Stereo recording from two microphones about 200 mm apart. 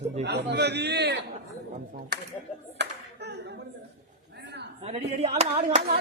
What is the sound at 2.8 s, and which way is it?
Clapping, 55° right (ahead or behind).